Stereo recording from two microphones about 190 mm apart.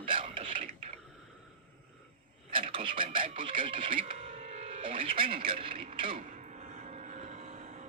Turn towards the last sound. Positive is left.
turn(degrees=-35)  # may be behind; listen again after turning